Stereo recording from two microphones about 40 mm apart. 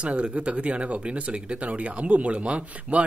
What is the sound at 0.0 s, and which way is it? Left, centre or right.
A man's voice, right.